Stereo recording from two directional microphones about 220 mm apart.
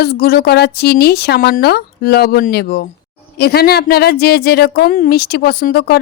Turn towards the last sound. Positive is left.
turn(degrees=45)  # may be behind; listen again after turning